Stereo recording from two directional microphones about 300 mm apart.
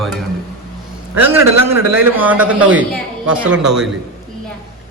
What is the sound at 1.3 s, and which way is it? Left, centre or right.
A man's voice, centre.